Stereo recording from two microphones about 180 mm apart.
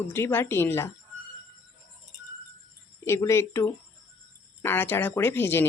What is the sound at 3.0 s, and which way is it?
Speech, 15° left (ahead or behind).